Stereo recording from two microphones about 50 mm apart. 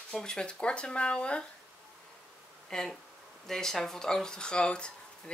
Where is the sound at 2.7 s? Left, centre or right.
Centre.